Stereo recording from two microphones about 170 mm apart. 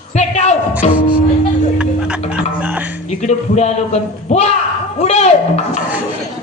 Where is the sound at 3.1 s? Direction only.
40° left (ahead or behind).